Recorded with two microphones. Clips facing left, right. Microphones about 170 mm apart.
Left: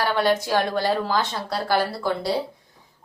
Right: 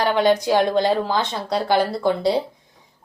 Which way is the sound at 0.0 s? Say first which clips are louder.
Right 4 dB; 20° right (ahead or behind).